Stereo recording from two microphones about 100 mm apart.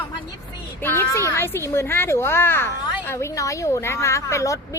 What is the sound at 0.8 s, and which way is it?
A woman's voice, 20° left (ahead or behind).